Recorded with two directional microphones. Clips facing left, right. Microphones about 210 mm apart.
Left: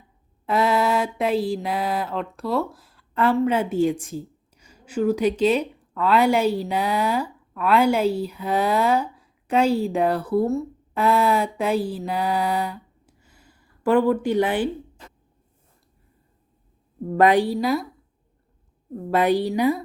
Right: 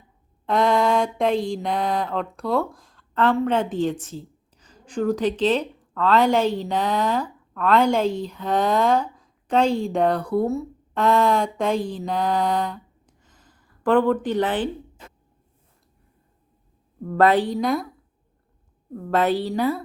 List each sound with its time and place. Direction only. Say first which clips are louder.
0.4 s a sound: right 1 dB; 5° left (ahead or behind)
17.1 s a woman's voice: left 1 dB; 15° left (ahead or behind)
18.9 s a woman's voice: left 1 dB; 15° left (ahead or behind)